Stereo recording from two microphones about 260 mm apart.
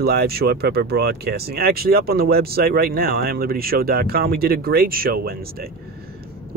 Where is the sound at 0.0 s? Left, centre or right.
Right.